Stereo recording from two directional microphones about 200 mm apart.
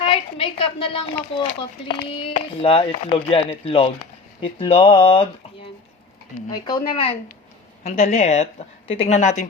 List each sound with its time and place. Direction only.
0.0 s a woman's voice: 25° left (ahead or behind)
6.5 s a woman's voice: 20° left (ahead or behind)